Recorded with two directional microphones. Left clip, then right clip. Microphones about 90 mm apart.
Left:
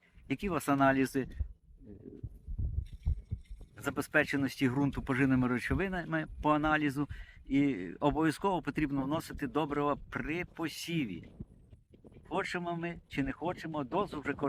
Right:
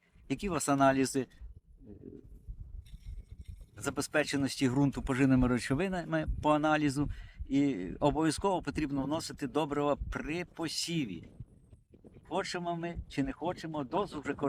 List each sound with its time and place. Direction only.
0.3 s speech: 40° right (ahead or behind)
3.8 s speech: 35° right (ahead or behind)
12.3 s speech: 30° right (ahead or behind)